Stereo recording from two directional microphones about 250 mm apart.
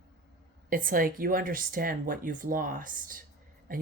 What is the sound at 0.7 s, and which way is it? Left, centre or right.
Speech, right.